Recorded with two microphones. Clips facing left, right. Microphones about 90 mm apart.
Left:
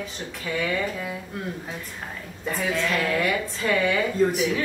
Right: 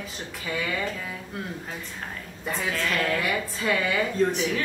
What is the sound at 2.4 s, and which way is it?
A woman's voice, centre (ahead or behind).